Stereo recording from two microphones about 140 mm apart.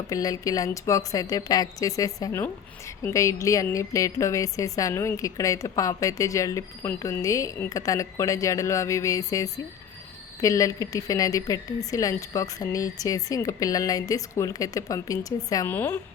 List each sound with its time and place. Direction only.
0.1 s a woman's voice: 25° left (ahead or behind)
15.7 s a woman's voice: 15° left (ahead or behind)